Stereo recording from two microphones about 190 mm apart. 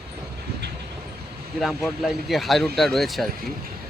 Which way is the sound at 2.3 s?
Centre (ahead or behind).